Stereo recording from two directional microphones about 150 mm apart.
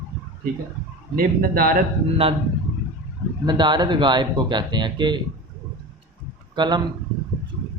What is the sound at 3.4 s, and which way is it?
Speech, 30° right (ahead or behind).